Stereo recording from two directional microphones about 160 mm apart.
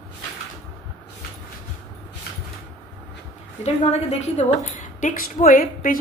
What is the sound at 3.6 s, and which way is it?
A woman's voice, 45° left (ahead or behind).